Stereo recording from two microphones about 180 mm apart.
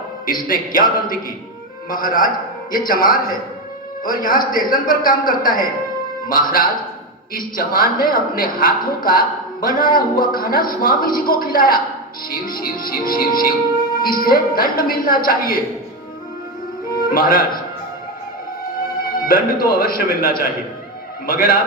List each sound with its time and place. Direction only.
0.3 s a man's voice: 50° left (ahead or behind)
17.1 s a man's voice: 50° left (ahead or behind)
19.2 s a man's voice: 50° left (ahead or behind)